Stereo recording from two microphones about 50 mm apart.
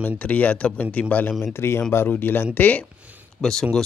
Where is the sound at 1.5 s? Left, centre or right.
Left.